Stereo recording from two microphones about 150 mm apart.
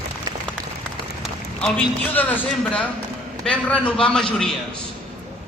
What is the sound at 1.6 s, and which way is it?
A man's voice, 10° left (ahead or behind).